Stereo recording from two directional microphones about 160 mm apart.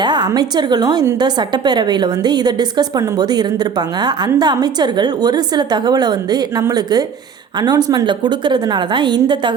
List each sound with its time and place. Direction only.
0.0 s a woman's voice: 25° right (ahead or behind)